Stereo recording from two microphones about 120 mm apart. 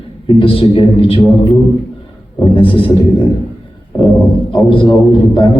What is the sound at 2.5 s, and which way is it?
Speech, 45° left (ahead or behind).